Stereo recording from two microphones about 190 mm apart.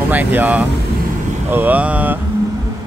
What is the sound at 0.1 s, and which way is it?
Speech, 10° right (ahead or behind).